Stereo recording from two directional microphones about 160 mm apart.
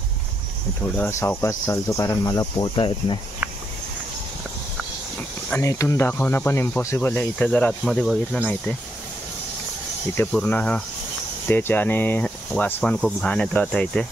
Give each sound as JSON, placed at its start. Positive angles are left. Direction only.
{"t": 0.9, "sound": "speech", "side_deg": 15}
{"t": 5.5, "sound": "speech", "side_deg": 20}
{"t": 10.1, "sound": "speech", "side_deg": 10}